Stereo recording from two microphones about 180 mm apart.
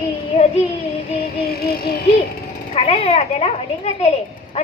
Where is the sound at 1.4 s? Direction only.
60° left (ahead or behind).